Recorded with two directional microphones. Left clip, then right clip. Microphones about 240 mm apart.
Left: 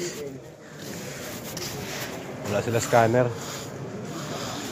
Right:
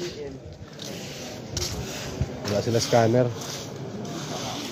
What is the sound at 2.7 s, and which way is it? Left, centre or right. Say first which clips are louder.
Speech: left 1 dB; right.